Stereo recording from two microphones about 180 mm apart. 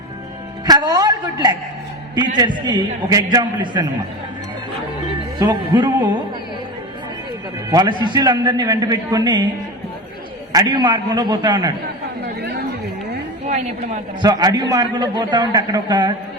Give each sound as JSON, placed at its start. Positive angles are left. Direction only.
{"t": 0.6, "sound": "a man's voice", "side_deg": -20}
{"t": 2.6, "sound": "a man's voice", "side_deg": -20}
{"t": 5.4, "sound": "a man's voice", "side_deg": -25}
{"t": 7.7, "sound": "a man's voice", "side_deg": -25}
{"t": 10.5, "sound": "a man's voice", "side_deg": -20}
{"t": 12.2, "sound": "chatter", "side_deg": -65}
{"t": 14.2, "sound": "a man's voice", "side_deg": -20}